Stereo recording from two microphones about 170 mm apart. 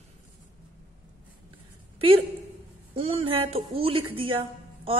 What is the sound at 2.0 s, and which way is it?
A woman's voice, 35° right (ahead or behind).